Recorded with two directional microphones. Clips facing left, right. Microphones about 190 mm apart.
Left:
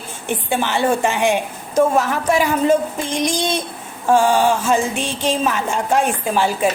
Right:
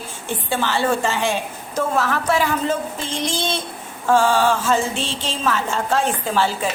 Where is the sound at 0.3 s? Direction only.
20° left (ahead or behind).